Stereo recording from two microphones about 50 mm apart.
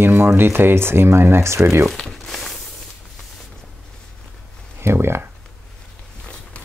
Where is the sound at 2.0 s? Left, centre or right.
Centre.